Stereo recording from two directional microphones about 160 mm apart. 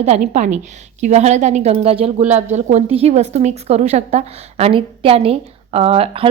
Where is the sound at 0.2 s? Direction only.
50° right (ahead or behind).